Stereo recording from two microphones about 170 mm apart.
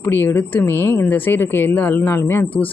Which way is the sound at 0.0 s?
10° left (ahead or behind).